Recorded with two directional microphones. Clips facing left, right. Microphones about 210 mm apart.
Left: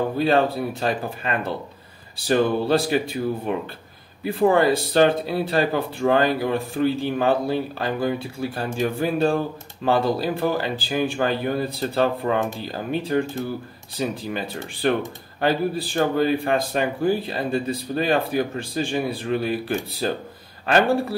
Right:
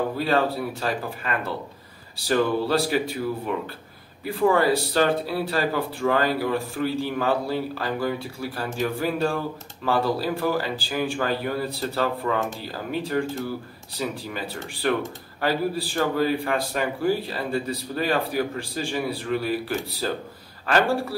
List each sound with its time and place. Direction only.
0.2 s speech: 20° left (ahead or behind)
4.5 s speech: 20° left (ahead or behind)